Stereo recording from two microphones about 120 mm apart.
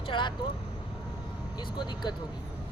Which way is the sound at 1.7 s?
40° left (ahead or behind).